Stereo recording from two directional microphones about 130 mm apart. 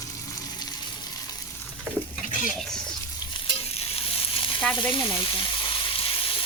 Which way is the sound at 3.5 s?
50° left (ahead or behind).